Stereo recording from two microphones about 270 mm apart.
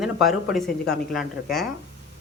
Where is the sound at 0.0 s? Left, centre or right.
Centre.